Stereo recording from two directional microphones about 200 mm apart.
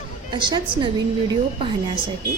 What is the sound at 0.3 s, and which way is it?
Speech, 25° right (ahead or behind).